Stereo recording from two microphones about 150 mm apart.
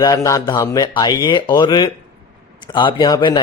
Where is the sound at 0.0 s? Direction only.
20° left (ahead or behind).